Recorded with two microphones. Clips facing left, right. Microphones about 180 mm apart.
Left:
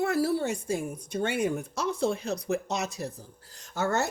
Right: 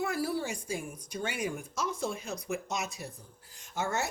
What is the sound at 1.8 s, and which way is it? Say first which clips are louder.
Speech: left 6 dB; 65° left (ahead or behind).